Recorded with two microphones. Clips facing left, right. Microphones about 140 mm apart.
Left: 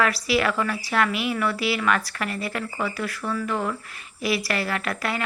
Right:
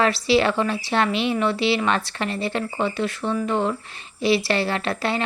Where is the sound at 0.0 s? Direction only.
25° right (ahead or behind).